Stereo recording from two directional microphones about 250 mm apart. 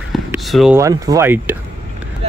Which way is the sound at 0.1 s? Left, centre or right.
Centre.